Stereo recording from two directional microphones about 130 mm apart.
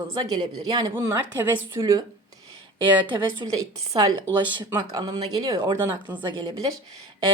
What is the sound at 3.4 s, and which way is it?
Speech, 35° right (ahead or behind).